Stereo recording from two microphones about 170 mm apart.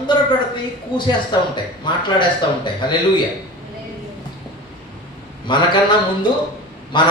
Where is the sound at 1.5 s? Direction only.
25° left (ahead or behind).